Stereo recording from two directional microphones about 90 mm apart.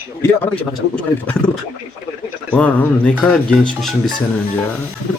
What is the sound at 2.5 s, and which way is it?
Speech, 15° left (ahead or behind).